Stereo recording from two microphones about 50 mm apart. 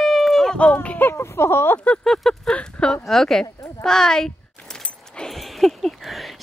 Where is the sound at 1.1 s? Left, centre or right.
Left.